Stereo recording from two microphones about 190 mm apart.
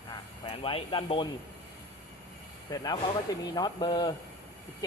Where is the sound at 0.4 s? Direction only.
30° left (ahead or behind).